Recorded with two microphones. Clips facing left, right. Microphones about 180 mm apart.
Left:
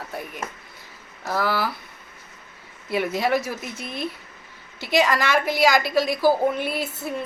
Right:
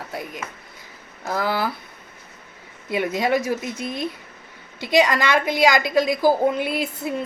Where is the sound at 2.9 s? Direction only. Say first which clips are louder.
Right 1 dB; 20° right (ahead or behind).